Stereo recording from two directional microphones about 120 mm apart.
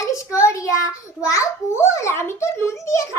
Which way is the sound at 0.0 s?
25° left (ahead or behind).